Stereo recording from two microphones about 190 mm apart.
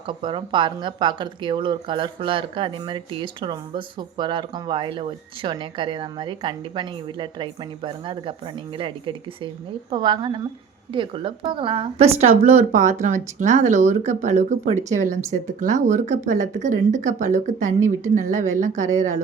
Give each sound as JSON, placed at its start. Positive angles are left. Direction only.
{"t": 0.1, "sound": "speech", "side_deg": -25}